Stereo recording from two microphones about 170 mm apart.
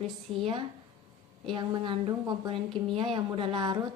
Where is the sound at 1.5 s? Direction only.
25° right (ahead or behind).